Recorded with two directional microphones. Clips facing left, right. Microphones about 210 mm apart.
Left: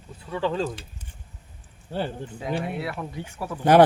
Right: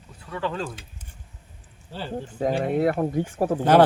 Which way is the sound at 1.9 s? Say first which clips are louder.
Left 6 dB; 55° left (ahead or behind).